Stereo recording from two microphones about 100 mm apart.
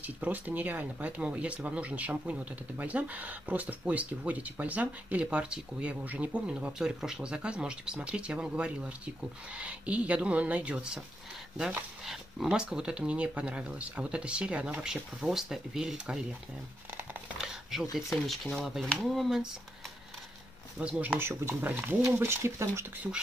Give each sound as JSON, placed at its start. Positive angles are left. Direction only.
{"t": 0.0, "sound": "speech", "side_deg": -15}
{"t": 17.4, "sound": "a sound", "side_deg": -5}
{"t": 17.9, "sound": "speech", "side_deg": 0}
{"t": 20.8, "sound": "speech", "side_deg": -20}